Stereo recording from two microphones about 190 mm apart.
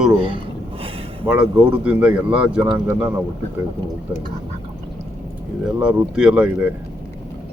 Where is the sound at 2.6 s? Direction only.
20° right (ahead or behind).